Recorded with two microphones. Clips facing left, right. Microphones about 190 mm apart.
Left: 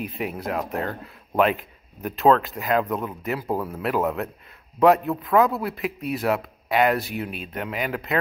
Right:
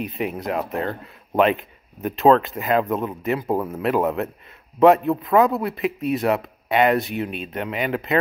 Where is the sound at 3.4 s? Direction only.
20° right (ahead or behind).